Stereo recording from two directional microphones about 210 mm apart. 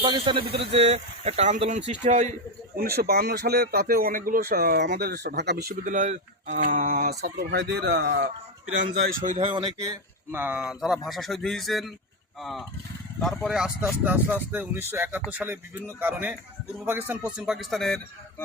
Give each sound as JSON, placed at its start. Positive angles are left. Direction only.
{"t": 0.0, "sound": "a man's voice", "side_deg": -25}
{"t": 2.7, "sound": "speech", "side_deg": -45}
{"t": 5.8, "sound": "speech", "side_deg": -35}
{"t": 9.4, "sound": "speech", "side_deg": -25}